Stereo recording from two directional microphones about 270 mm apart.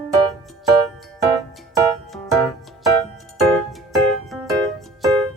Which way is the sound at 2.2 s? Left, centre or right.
Centre.